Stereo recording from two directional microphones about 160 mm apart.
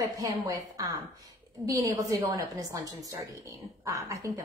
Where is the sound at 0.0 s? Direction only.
20° right (ahead or behind).